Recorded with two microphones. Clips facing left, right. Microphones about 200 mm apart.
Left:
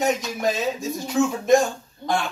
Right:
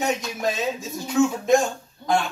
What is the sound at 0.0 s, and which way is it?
Speech, centre (ahead or behind).